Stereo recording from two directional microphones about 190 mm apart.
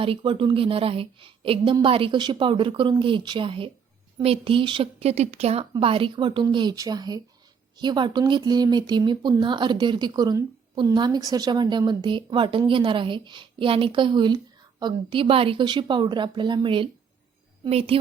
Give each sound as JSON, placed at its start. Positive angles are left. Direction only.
{"t": 0.0, "sound": "a woman's voice", "side_deg": -30}